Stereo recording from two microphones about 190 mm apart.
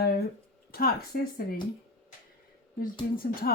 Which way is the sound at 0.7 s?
50° left (ahead or behind).